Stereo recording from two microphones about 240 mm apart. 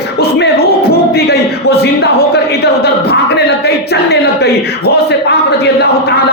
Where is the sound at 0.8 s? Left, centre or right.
Left.